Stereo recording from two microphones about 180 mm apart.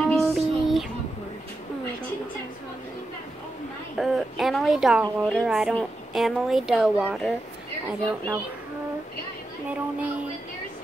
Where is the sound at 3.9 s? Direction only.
Centre (ahead or behind).